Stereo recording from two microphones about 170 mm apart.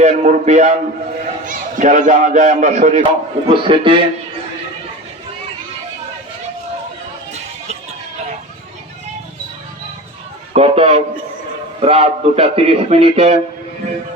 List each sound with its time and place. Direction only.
0.0 s a man's voice: 45° right (ahead or behind)
10.5 s a man's voice: 35° right (ahead or behind)